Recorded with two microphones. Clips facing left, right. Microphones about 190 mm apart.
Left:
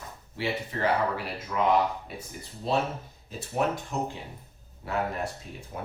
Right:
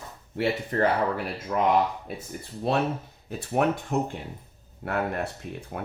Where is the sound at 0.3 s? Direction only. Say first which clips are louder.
Right 6 dB; 50° right (ahead or behind).